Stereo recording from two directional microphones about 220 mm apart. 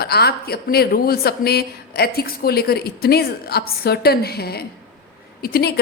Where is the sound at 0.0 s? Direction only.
45° left (ahead or behind).